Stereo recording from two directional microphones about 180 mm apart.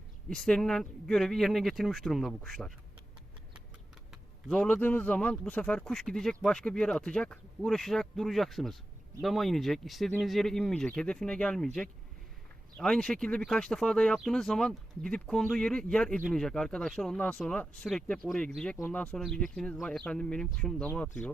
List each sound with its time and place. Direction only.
0.3 s speech: 5° left (ahead or behind)
4.1 s speech: centre (ahead or behind)